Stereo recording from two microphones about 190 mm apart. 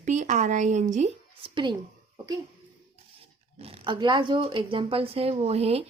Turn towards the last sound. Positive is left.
turn(degrees=-35)  # may be behind; listen again after turning